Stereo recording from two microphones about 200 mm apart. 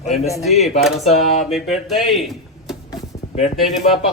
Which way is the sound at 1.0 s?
35° left (ahead or behind).